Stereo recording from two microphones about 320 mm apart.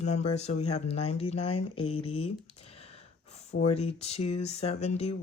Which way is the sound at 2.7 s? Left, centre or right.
Centre.